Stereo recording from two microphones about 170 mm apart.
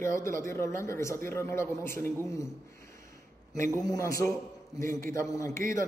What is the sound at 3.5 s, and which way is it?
A man's voice, 20° left (ahead or behind).